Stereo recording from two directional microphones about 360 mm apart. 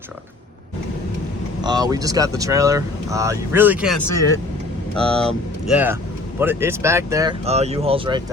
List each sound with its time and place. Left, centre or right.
1.6 s speech: centre